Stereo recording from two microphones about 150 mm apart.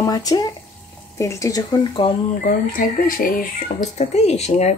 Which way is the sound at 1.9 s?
35° left (ahead or behind).